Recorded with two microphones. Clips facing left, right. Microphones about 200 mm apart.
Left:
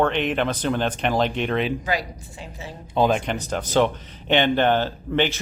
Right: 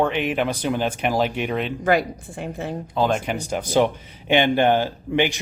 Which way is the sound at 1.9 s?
55° right (ahead or behind).